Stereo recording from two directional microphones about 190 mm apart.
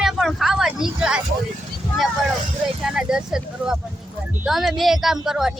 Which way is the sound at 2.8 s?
5° right (ahead or behind).